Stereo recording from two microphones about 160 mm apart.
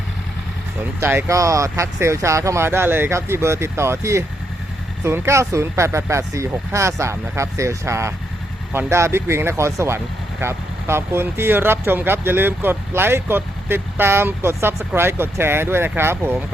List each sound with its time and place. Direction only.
0.9 s speech: 15° right (ahead or behind)